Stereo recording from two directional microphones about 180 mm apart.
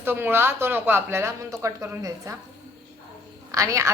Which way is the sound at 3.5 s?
20° right (ahead or behind).